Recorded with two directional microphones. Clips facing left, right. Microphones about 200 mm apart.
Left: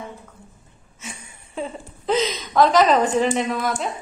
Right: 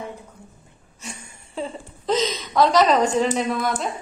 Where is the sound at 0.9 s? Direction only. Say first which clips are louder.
Even; 5° left (ahead or behind).